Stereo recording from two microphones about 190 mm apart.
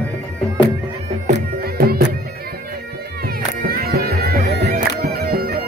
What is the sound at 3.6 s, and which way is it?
Bagpipes, 55° right (ahead or behind).